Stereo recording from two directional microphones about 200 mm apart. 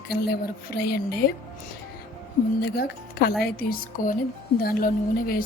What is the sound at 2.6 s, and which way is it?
A woman's voice, 50° left (ahead or behind).